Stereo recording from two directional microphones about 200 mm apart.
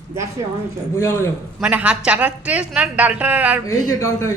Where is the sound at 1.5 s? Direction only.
5° right (ahead or behind).